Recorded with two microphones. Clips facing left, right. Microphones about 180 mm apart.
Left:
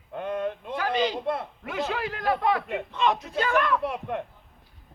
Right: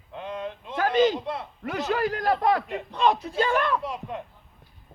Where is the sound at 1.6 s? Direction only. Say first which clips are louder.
Right 6 dB; 40° right (ahead or behind).